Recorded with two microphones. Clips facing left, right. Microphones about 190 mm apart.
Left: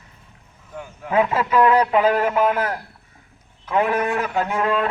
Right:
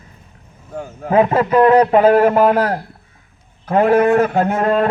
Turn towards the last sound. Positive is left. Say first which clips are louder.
# right 6 dB
turn(degrees=-45)  # may be behind; listen again after turning